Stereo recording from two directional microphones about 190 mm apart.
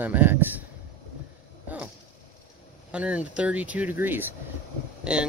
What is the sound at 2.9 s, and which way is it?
Speech, 5° right (ahead or behind).